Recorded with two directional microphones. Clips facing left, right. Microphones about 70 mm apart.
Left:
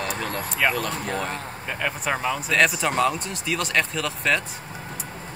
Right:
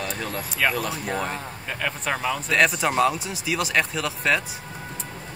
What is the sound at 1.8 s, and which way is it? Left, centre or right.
Speech, centre.